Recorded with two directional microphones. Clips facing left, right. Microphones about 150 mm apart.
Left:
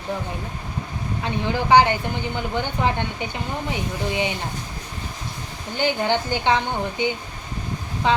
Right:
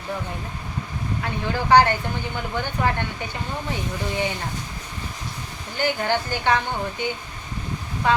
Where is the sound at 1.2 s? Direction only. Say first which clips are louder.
Left 3 dB; 15° left (ahead or behind).